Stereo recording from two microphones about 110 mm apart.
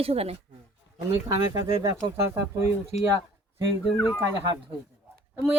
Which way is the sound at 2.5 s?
25° right (ahead or behind).